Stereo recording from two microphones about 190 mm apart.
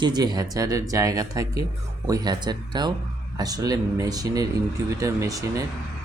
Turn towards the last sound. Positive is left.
turn(degrees=-15)  # may be behind; listen again after turning